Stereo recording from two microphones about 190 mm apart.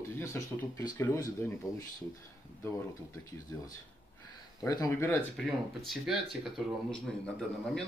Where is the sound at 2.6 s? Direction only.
15° left (ahead or behind).